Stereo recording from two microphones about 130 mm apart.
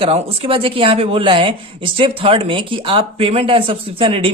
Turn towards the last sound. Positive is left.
turn(degrees=-45)  # may be behind; listen again after turning